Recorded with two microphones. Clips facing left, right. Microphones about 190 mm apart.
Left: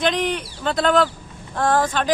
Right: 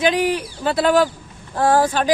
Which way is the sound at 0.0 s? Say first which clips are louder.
Right 3 dB; 10° right (ahead or behind).